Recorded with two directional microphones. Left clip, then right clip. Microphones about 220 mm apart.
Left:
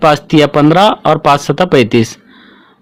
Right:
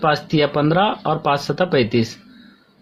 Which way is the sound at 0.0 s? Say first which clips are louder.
Left 9 dB; 40° left (ahead or behind).